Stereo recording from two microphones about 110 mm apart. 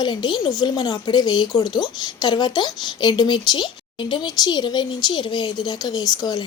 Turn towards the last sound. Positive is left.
turn(degrees=40)  # may be behind; listen again after turning